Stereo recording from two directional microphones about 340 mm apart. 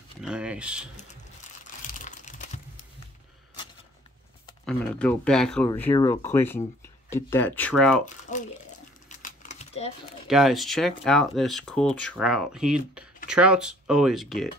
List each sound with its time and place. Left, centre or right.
0.2 s a sound: centre
1.9 s crumpling: left
4.6 s speech: centre
8.0 s crumpling: left
9.2 s typing: left
10.2 s speech: centre